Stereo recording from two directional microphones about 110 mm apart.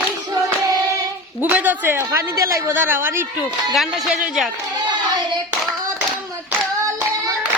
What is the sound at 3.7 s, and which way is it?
Speech, centre (ahead or behind).